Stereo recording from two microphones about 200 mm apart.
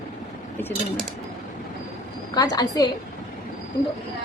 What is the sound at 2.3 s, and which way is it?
Speech, 20° left (ahead or behind).